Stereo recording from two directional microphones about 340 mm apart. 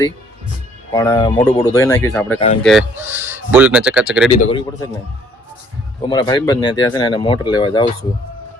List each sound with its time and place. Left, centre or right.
0.9 s speech: centre
4.3 s speech: centre
6.0 s speech: centre